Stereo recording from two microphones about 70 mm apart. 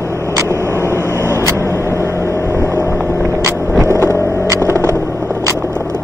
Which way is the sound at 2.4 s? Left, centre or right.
Right.